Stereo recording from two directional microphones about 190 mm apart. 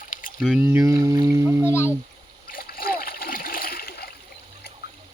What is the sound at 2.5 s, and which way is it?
Splash, 50° left (ahead or behind).